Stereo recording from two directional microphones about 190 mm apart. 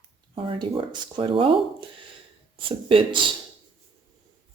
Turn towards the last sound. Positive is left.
turn(degrees=-25)  # may be behind; listen again after turning